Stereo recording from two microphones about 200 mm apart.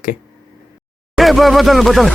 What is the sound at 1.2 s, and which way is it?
Speech, centre (ahead or behind).